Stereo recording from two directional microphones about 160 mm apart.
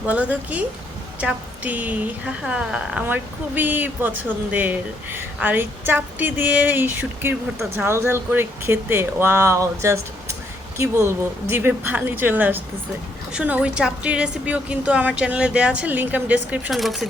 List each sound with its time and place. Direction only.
0.0 s speech: 10° right (ahead or behind)